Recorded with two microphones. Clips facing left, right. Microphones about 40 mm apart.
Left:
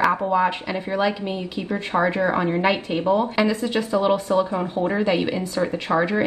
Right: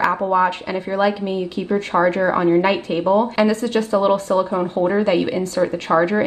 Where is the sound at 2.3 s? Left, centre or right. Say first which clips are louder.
Right 5 dB; centre.